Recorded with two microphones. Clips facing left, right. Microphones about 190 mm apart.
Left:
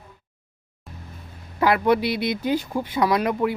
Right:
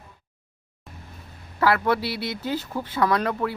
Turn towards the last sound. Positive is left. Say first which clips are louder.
# left 2 dB
turn(degrees=15)  # may be behind; listen again after turning